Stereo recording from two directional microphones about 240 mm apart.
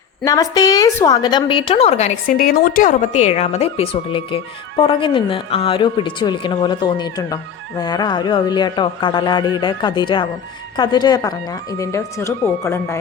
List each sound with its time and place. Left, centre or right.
0.3 s a woman's voice: centre